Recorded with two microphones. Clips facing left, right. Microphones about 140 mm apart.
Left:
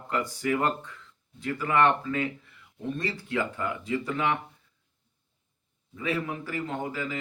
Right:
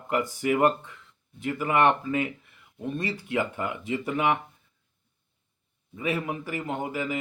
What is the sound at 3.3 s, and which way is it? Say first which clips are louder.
Speech: right 1 dB; 20° right (ahead or behind).